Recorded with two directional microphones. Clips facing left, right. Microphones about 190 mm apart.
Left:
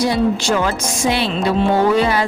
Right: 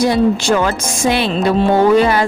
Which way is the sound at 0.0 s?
50° right (ahead or behind).